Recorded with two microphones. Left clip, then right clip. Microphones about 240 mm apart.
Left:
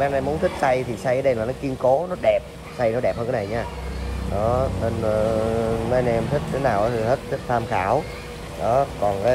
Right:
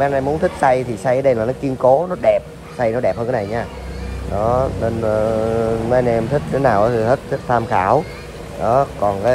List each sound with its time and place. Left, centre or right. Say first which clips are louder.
0.0 s speech: right 5 dB; centre
2.2 s speech: right 4 dB; centre